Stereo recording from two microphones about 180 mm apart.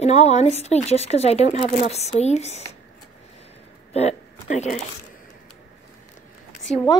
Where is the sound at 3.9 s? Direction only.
35° left (ahead or behind).